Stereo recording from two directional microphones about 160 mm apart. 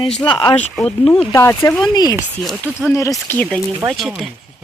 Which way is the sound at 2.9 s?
20° left (ahead or behind).